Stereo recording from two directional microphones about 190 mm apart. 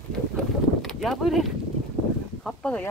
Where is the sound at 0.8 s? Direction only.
Centre (ahead or behind).